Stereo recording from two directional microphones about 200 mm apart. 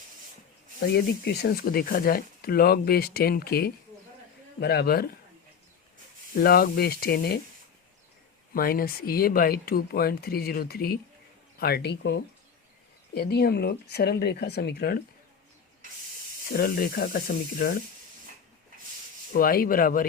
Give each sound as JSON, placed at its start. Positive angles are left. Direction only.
{"t": 0.9, "sound": "speech", "side_deg": 55}
{"t": 6.3, "sound": "speech", "side_deg": 50}
{"t": 8.5, "sound": "speech", "side_deg": 45}
{"t": 16.5, "sound": "speech", "side_deg": 50}
{"t": 19.3, "sound": "speech", "side_deg": 45}